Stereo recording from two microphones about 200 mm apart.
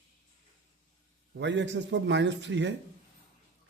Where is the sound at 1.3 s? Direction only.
60° right (ahead or behind).